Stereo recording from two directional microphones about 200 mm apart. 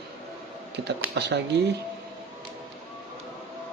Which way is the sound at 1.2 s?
60° right (ahead or behind).